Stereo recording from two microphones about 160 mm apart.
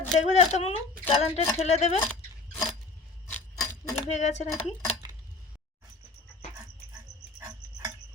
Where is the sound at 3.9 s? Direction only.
45° left (ahead or behind).